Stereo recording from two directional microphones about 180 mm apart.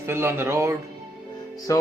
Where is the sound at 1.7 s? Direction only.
20° left (ahead or behind).